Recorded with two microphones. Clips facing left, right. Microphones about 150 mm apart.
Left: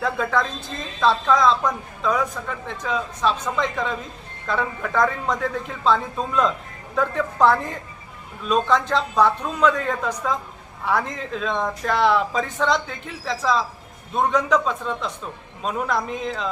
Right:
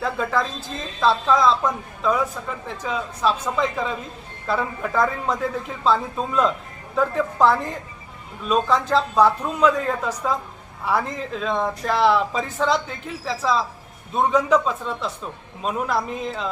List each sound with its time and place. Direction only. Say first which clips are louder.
0.0 s speech: left 1 dB; centre (ahead or behind)